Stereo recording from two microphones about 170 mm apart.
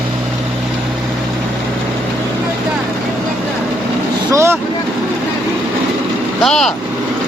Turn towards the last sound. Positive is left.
turn(degrees=5)  # may be behind; listen again after turning